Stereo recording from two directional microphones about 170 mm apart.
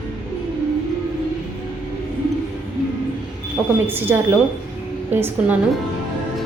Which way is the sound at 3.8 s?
10° right (ahead or behind).